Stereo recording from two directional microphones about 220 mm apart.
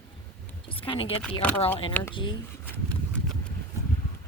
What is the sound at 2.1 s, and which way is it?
Speech, 20° left (ahead or behind).